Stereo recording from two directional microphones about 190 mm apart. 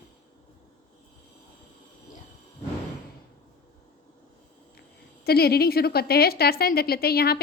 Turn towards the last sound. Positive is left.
turn(degrees=55)  # may be behind; listen again after turning